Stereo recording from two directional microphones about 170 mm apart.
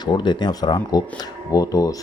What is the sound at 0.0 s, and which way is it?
Speech, 25° left (ahead or behind).